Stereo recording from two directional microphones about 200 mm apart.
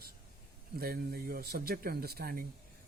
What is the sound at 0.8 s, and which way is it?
Speech, 50° right (ahead or behind).